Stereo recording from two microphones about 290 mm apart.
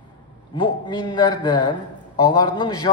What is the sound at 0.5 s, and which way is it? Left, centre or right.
A man's voice, centre.